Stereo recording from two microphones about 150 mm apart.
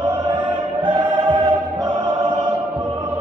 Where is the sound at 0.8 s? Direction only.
30° right (ahead or behind).